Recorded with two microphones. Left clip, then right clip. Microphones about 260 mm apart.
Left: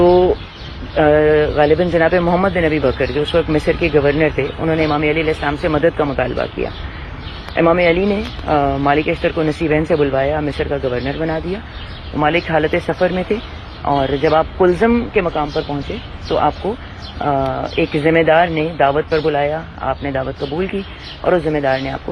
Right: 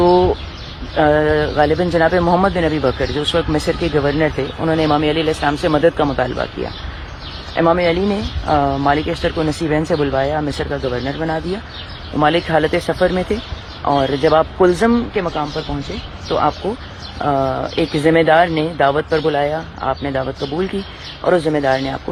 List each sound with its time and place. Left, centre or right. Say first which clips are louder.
0.0 s bird: left 1 dB; right
0.9 s a man's voice: left 2 dB; right
7.5 s a man's voice: left 2 dB; right